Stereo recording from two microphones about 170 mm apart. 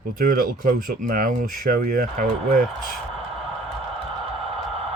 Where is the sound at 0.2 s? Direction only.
55° right (ahead or behind).